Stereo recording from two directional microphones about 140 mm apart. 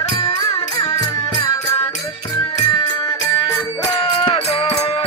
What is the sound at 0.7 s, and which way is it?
Music, 30° left (ahead or behind).